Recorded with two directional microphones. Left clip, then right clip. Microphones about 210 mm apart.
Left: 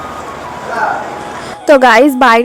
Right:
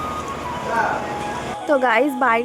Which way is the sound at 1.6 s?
50° left (ahead or behind).